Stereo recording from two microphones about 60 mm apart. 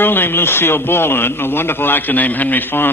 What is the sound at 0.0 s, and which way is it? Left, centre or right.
A man's voice, left.